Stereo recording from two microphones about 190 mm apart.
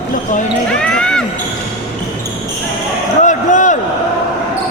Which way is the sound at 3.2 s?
40° left (ahead or behind).